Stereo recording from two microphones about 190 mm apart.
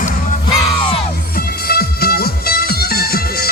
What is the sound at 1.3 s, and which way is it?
Music, 55° left (ahead or behind).